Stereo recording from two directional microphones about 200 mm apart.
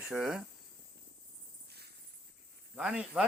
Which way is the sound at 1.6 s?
55° right (ahead or behind).